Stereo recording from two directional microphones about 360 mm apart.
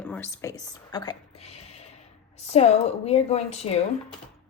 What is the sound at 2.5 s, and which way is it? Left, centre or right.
A woman's voice, centre.